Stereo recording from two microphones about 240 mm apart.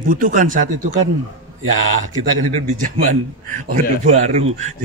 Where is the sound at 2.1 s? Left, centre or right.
Right.